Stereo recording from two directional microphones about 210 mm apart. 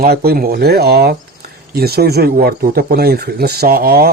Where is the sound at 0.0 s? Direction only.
50° right (ahead or behind).